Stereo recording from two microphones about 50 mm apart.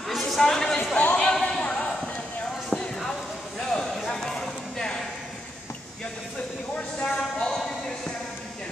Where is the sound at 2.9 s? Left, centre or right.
Centre.